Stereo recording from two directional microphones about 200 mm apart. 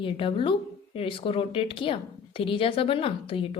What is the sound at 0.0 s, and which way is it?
A woman's voice, 25° left (ahead or behind).